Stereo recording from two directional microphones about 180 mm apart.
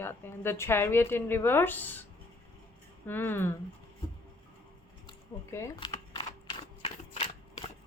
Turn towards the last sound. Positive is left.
turn(degrees=30)  # may be behind; listen again after turning